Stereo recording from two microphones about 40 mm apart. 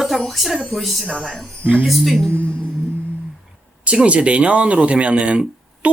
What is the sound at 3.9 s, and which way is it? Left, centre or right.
Speech, right.